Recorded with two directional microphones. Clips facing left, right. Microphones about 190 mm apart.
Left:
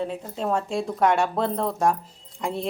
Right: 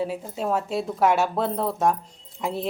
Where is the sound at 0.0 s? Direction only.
5° right (ahead or behind).